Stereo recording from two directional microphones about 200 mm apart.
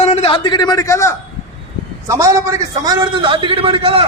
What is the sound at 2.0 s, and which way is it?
A man's voice, 15° right (ahead or behind).